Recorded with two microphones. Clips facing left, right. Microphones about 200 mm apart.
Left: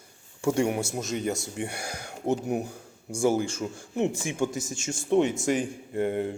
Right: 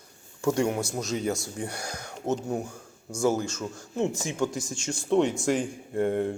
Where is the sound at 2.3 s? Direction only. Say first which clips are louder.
Left 2 dB; 15° left (ahead or behind).